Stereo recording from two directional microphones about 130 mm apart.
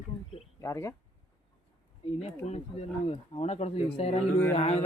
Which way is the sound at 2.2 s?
55° left (ahead or behind).